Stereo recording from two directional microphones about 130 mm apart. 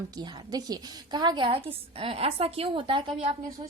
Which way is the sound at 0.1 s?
30° right (ahead or behind).